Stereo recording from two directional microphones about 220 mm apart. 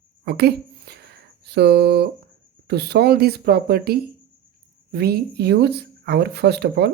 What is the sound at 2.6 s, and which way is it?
Speech, 45° right (ahead or behind).